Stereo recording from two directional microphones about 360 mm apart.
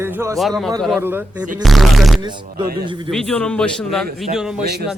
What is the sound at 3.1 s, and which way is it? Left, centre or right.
Speech, centre.